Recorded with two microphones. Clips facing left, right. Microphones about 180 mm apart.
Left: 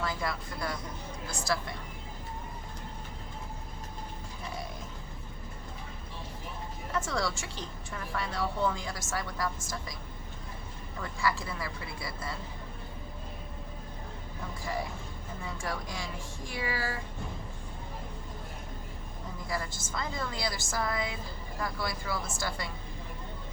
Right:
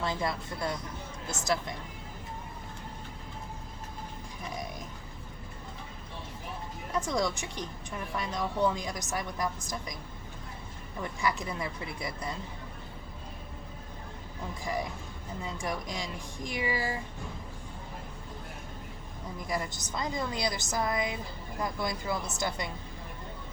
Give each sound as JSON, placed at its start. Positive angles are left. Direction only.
{"t": 0.0, "sound": "a woman's voice", "side_deg": -25}
{"t": 6.9, "sound": "a woman's voice", "side_deg": -15}
{"t": 11.0, "sound": "a woman's voice", "side_deg": -20}
{"t": 15.4, "sound": "a woman's voice", "side_deg": -15}
{"t": 19.5, "sound": "a woman's voice", "side_deg": -20}